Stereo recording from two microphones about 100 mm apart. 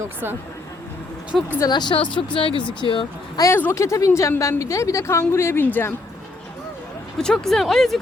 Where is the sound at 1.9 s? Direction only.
60° left (ahead or behind).